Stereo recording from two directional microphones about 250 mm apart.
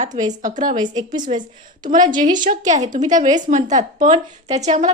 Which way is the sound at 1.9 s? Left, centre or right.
Right.